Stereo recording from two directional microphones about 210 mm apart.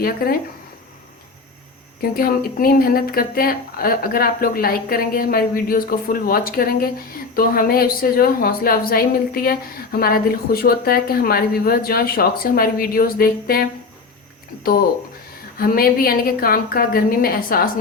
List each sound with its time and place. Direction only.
0.2 s a woman's voice: 45° left (ahead or behind)
2.0 s a woman's voice: 45° left (ahead or behind)
15.5 s a woman's voice: 45° left (ahead or behind)